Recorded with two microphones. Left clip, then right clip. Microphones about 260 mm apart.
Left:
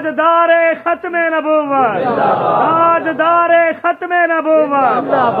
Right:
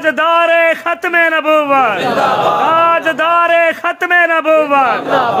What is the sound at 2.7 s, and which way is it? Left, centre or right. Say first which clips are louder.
A man's voice: right 1 dB; right.